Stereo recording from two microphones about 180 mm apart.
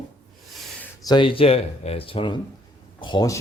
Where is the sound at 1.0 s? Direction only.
25° left (ahead or behind).